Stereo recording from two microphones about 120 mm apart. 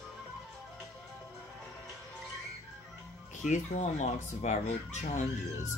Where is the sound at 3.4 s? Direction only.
85° left.